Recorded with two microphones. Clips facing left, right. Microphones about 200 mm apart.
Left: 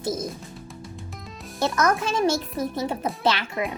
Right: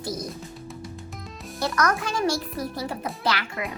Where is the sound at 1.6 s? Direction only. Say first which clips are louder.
Left 2 dB; 25° left (ahead or behind).